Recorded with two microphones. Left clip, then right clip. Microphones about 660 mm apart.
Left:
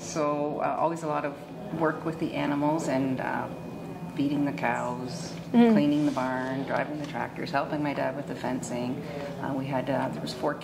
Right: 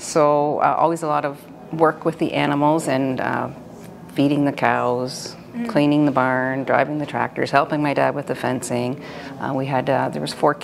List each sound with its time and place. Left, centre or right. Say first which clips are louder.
0.1 s speech: right 12 dB; right